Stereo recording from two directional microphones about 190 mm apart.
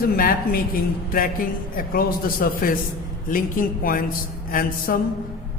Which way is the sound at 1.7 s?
50° left (ahead or behind).